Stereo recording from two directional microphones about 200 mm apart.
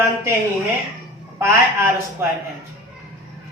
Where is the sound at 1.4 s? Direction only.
15° right (ahead or behind).